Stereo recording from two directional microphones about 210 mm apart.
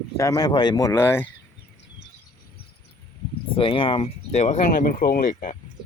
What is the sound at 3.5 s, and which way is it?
Speech, 25° left (ahead or behind).